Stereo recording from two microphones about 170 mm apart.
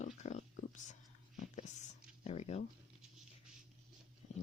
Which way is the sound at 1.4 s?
45° left (ahead or behind).